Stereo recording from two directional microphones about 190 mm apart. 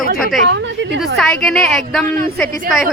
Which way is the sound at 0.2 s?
Centre (ahead or behind).